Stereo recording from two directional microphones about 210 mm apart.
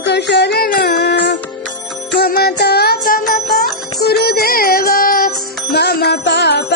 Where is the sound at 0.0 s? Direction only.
55° left (ahead or behind).